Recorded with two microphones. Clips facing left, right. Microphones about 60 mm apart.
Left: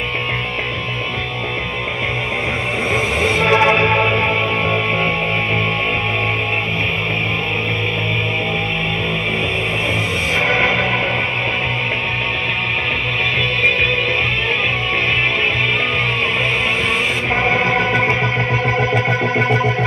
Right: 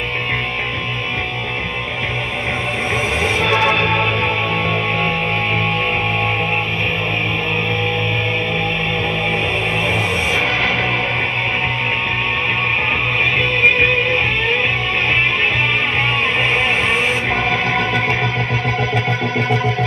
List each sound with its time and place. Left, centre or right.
3.4 s music: left
17.4 s music: left